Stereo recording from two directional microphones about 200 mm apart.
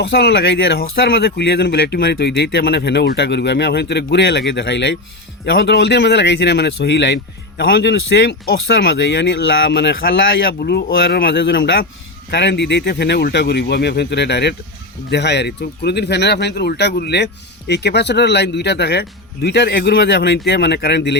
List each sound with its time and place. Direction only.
0.0 s speech: 55° left (ahead or behind)
10.6 s speech: 50° left (ahead or behind)